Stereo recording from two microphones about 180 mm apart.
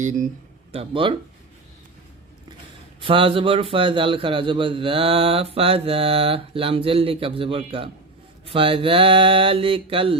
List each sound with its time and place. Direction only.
0.0 s speech: 45° right (ahead or behind)
0.7 s speech: 30° right (ahead or behind)
3.0 s a man's voice: 30° right (ahead or behind)